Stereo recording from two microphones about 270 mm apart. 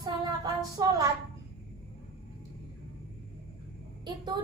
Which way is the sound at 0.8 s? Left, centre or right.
Centre.